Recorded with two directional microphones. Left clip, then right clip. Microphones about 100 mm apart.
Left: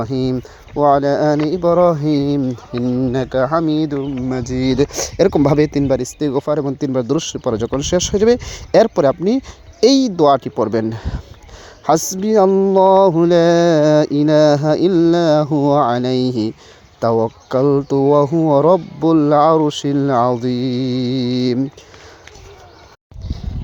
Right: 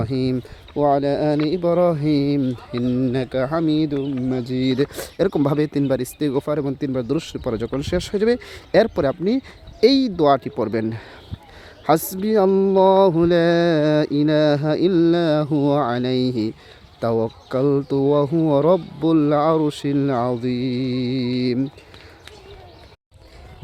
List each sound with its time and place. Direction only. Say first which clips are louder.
0.0 s mantra: left 3 dB; 20° left (ahead or behind)
2.9 s speech: left 3 dB; 5° left (ahead or behind)
3.2 s mantra: left 5 dB; 20° left (ahead or behind)
3.5 s speech: left 4 dB; 15° left (ahead or behind)
4.3 s speech: left 4 dB; 25° right (ahead or behind)
4.7 s speech: left 5 dB; 35° left (ahead or behind)
5.9 s speech: left 4 dB; 15° left (ahead or behind)
6.7 s speech: left 5 dB; 30° left (ahead or behind)
7.3 s mantra: left 6 dB; 20° left (ahead or behind)